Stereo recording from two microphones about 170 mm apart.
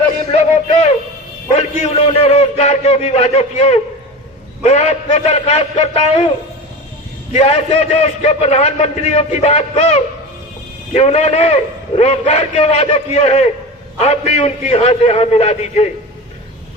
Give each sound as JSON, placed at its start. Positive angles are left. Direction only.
{"t": 0.3, "sound": "a sound", "side_deg": 40}
{"t": 1.5, "sound": "a man's voice", "side_deg": 35}
{"t": 7.3, "sound": "a man's voice", "side_deg": 35}